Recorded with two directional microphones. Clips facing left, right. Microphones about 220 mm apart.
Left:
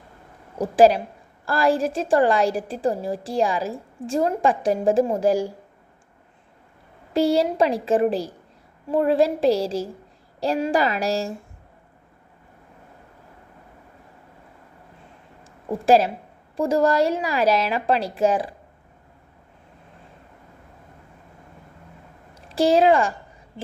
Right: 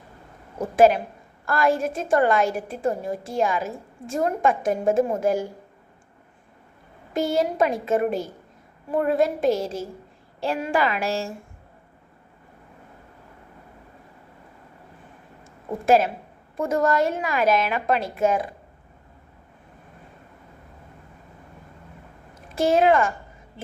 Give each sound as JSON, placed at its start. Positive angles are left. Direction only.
{"t": 1.5, "sound": "a woman's voice", "side_deg": 30}
{"t": 7.1, "sound": "a woman's voice", "side_deg": 30}
{"t": 15.9, "sound": "a woman's voice", "side_deg": 30}
{"t": 22.4, "sound": "a woman's voice", "side_deg": 30}